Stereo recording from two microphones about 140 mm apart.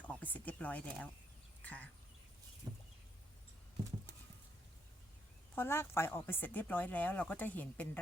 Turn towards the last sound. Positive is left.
turn(degrees=10)  # may be behind; listen again after turning